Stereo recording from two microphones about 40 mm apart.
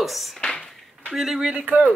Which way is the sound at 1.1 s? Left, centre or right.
Centre.